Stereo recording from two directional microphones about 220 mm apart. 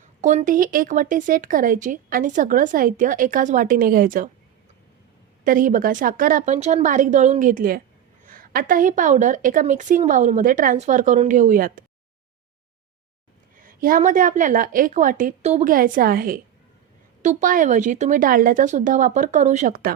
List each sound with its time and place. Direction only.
0.2 s speech: 35° right (ahead or behind)
5.5 s speech: 40° right (ahead or behind)
13.6 s speech: 40° right (ahead or behind)